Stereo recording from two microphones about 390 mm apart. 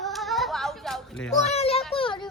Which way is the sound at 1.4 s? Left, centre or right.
Centre.